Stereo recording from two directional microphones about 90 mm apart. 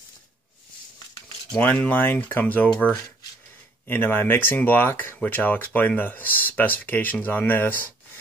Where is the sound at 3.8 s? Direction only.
25° left (ahead or behind).